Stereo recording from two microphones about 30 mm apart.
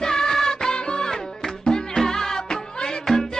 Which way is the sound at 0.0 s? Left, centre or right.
Centre.